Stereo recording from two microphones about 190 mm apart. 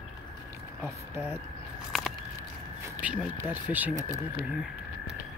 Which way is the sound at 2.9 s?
5° right (ahead or behind).